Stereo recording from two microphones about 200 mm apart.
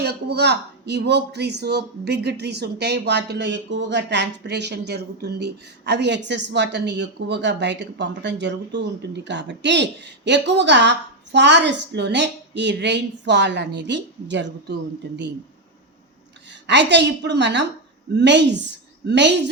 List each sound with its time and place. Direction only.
0.0 s speech: 55° right (ahead or behind)
16.5 s speech: 60° right (ahead or behind)